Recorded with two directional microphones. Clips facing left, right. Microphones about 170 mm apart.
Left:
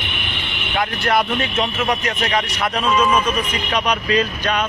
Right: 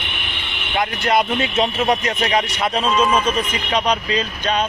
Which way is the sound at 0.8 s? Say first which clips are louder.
Right 1 dB; 20° right (ahead or behind).